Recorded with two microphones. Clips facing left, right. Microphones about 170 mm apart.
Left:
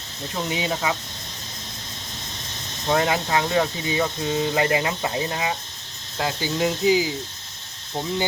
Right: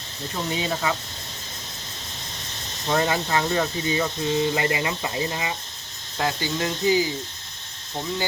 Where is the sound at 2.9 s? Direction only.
15° left (ahead or behind).